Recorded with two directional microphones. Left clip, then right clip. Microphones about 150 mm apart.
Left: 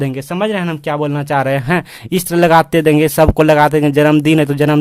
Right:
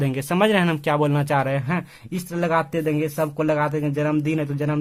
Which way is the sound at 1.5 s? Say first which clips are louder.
Left 10 dB; 45° left (ahead or behind).